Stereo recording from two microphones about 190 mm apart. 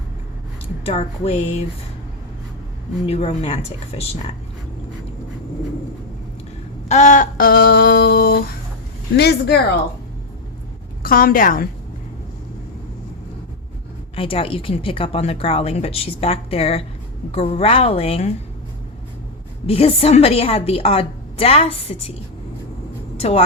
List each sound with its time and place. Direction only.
0.9 s speech: 35° left (ahead or behind)
3.1 s speech: 30° left (ahead or behind)
6.8 s a sound: 40° left (ahead or behind); by 8.4 s 55° left (ahead or behind)
9.1 s speech: 60° left (ahead or behind)
11.0 s a woman's voice: 50° left (ahead or behind)
14.2 s speech: 30° left (ahead or behind)
19.6 s speech: 30° left (ahead or behind)
23.1 s vehicle: 30° left (ahead or behind)